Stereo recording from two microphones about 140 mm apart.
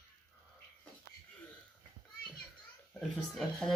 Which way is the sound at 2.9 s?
Centre (ahead or behind).